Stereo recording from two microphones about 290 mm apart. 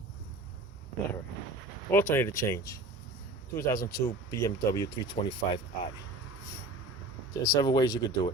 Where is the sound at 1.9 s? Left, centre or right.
Centre.